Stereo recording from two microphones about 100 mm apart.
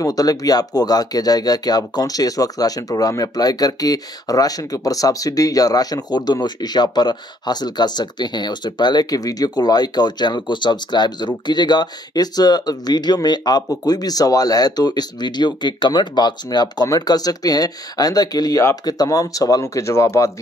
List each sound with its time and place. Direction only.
0.0 s speech: 35° left (ahead or behind)